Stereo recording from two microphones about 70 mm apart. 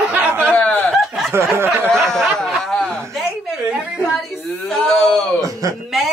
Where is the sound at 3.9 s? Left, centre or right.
Centre.